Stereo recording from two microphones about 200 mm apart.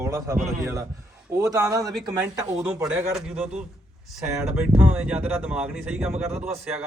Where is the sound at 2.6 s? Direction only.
5° right (ahead or behind).